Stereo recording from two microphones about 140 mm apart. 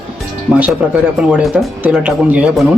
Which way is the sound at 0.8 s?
10° right (ahead or behind).